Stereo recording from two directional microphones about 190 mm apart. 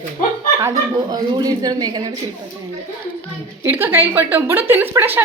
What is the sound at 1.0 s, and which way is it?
Speech, 20° right (ahead or behind).